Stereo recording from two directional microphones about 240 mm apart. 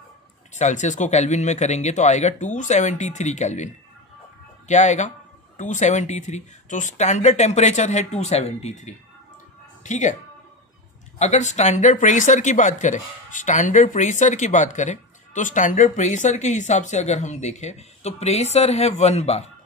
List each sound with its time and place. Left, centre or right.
0.5 s speech: left
11.1 s speech: left